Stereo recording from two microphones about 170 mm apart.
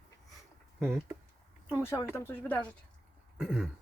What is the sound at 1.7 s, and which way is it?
Speech, 15° left (ahead or behind).